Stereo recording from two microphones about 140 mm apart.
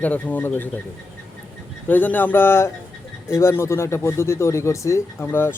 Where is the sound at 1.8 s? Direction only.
15° left (ahead or behind).